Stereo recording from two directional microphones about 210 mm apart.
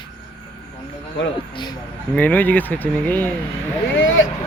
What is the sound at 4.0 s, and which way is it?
Speech, 65° left (ahead or behind).